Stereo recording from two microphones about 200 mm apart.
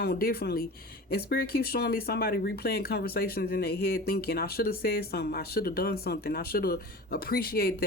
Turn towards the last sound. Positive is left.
turn(degrees=50)  # may be behind; listen again after turning